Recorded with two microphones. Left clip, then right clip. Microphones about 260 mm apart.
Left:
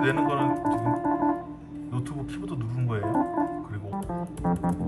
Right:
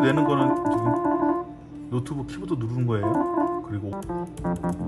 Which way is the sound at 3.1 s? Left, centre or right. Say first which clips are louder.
Right 1 dB; left.